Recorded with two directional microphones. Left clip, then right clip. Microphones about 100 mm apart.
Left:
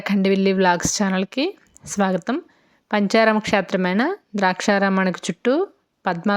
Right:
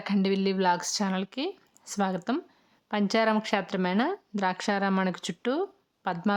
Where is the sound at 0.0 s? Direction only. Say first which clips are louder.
Left 8 dB; 35° left (ahead or behind).